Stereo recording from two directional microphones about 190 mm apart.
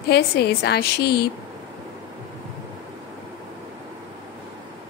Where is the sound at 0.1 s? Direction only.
60° left (ahead or behind).